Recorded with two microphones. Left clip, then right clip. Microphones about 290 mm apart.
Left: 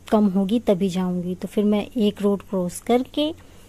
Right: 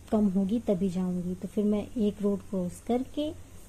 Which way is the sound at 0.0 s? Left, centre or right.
Left.